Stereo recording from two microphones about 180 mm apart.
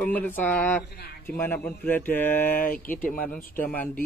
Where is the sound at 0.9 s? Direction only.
60° left (ahead or behind).